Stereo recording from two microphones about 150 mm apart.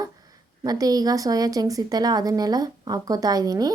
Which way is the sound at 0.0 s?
25° right (ahead or behind).